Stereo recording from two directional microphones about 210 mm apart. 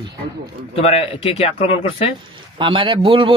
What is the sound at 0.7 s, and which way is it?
Speech, 30° left (ahead or behind).